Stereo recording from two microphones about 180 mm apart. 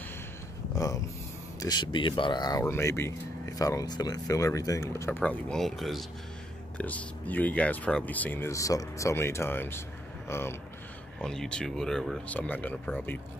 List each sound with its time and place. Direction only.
0.7 s speech: 20° left (ahead or behind)
11.1 s speech: 5° left (ahead or behind)